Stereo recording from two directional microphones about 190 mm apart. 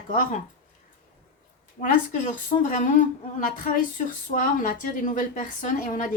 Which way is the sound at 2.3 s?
40° left (ahead or behind).